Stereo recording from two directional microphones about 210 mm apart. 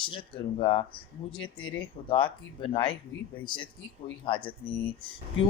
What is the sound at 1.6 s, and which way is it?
Speech, 75° left (ahead or behind).